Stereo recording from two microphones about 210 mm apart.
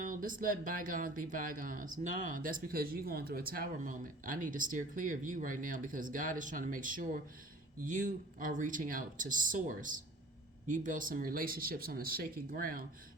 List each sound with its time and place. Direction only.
0.0 s speech: 40° right (ahead or behind)